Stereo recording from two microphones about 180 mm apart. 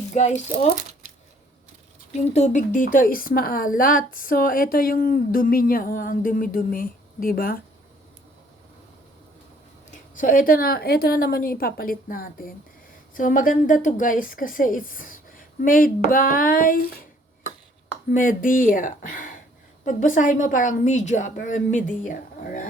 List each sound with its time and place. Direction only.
0.1 s speech: 40° left (ahead or behind)
2.1 s a woman's voice: 40° left (ahead or behind); by 7.6 s 55° left (ahead or behind)
10.2 s a woman's voice: 50° left (ahead or behind)
18.1 s a woman's voice: 50° left (ahead or behind)